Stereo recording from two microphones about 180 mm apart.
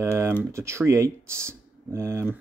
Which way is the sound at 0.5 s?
15° right (ahead or behind).